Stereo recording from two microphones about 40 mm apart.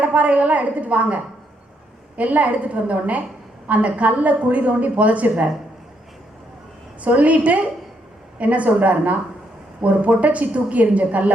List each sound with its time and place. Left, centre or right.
0.0 s a woman's voice: right
7.0 s a woman's voice: right